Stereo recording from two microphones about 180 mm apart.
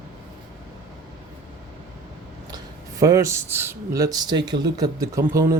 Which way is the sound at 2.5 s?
20° right (ahead or behind).